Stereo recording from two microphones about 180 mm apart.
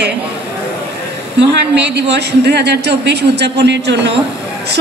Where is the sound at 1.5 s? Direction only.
70° right (ahead or behind).